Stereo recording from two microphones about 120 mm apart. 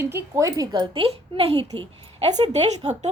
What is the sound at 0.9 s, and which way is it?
Speech, 50° right (ahead or behind).